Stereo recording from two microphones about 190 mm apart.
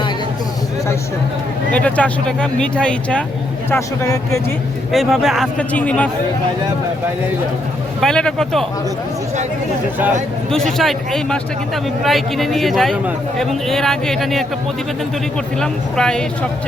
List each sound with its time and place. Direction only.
1.7 s speech: 5° left (ahead or behind)
3.7 s speech: 15° left (ahead or behind)
4.9 s speech: centre (ahead or behind)
8.0 s speech: 5° left (ahead or behind)
10.5 s speech: centre (ahead or behind)
15.6 s speech: 5° left (ahead or behind)